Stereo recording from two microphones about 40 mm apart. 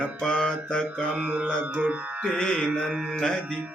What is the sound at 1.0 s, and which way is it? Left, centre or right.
Mantra, right.